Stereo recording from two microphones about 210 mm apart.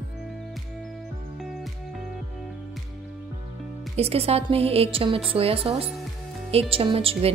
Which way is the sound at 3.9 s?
30° right (ahead or behind).